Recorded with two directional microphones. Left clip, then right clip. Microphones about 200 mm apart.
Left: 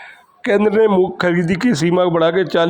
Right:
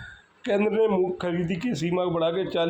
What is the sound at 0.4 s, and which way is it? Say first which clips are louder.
A man's voice: left 9 dB; 40° left (ahead or behind).